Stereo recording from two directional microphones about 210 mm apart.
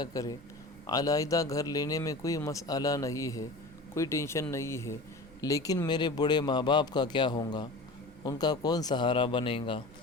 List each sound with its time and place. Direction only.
0.0 s a man's voice: 15° left (ahead or behind)